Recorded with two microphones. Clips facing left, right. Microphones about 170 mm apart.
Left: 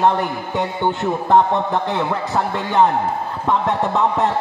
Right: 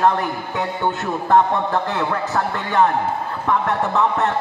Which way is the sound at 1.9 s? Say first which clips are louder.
Left 1 dB; 20° left (ahead or behind).